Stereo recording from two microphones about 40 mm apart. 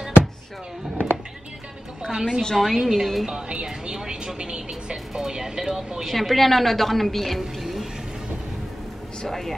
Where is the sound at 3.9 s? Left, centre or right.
Centre.